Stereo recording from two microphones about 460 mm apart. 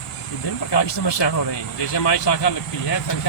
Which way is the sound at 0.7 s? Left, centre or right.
Left.